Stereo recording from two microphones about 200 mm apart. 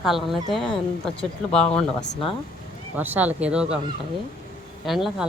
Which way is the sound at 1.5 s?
5° left (ahead or behind).